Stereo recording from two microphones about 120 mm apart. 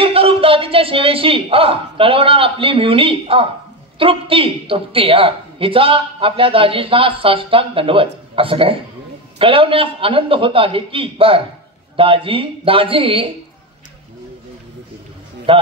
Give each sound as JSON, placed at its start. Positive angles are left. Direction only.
{"t": 0.0, "sound": "a woman's voice", "side_deg": -50}
{"t": 15.5, "sound": "a man's voice", "side_deg": -50}